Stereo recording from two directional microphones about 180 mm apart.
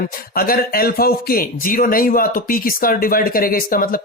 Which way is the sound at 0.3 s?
55° left (ahead or behind).